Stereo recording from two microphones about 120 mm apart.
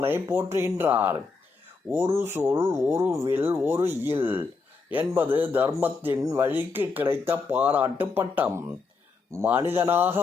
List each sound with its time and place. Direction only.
0.0 s speech: 20° right (ahead or behind)
2.1 s speech: 20° right (ahead or behind)